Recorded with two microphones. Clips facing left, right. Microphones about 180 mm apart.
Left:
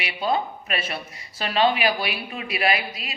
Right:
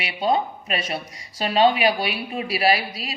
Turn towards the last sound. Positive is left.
turn(degrees=-30)  # may be behind; listen again after turning